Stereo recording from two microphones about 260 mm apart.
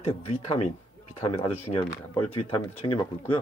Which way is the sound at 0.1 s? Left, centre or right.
Left.